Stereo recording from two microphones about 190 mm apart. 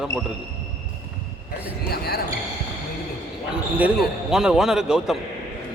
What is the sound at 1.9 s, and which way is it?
Speech, 55° left (ahead or behind).